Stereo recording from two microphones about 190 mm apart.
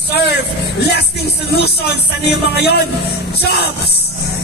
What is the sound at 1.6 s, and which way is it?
Speech, 60° left (ahead or behind).